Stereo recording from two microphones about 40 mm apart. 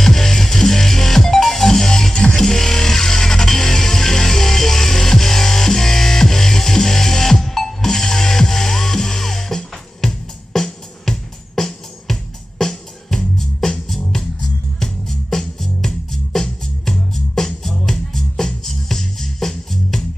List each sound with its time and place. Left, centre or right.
0.0 s music: centre